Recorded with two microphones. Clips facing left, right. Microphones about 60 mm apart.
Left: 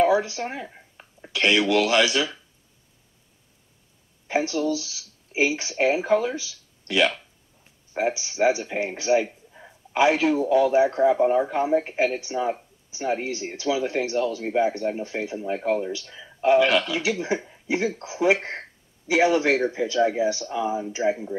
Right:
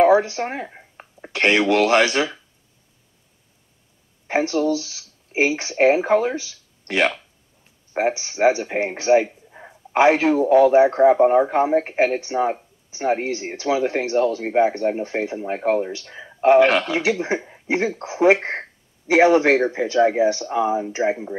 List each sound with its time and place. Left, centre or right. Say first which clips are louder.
0.0 s speech: right 5 dB; right
4.3 s a man's voice: right 4 dB; right